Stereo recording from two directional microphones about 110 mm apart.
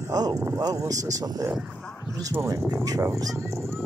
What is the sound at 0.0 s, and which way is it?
Speech, 35° right (ahead or behind).